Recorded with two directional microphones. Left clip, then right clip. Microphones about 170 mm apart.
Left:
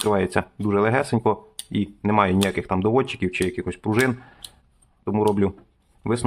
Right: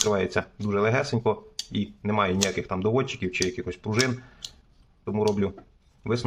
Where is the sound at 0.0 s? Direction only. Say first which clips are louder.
Left 3 dB; 30° left (ahead or behind).